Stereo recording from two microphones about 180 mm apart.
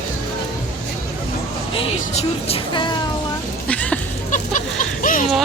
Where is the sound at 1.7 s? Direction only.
30° left (ahead or behind).